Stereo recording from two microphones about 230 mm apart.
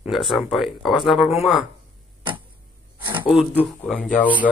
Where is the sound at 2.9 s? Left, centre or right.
Centre.